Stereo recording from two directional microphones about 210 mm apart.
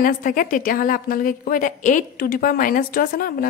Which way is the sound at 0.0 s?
40° left (ahead or behind).